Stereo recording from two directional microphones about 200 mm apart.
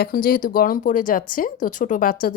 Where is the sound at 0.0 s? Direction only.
45° left (ahead or behind).